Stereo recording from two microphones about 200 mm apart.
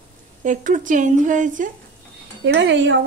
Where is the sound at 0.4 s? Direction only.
40° right (ahead or behind).